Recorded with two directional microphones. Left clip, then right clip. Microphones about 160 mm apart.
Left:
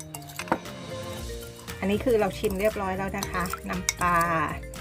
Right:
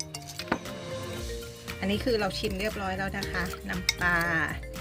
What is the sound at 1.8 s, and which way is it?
Speech, 25° left (ahead or behind).